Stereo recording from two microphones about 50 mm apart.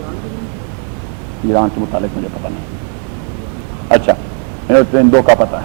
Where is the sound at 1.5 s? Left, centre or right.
Left.